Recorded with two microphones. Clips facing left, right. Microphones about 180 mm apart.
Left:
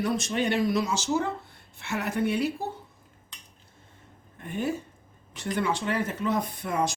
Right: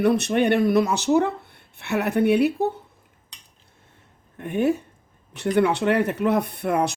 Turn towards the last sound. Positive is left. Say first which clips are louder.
# right 6 dB
turn(degrees=-60)  # may be behind; listen again after turning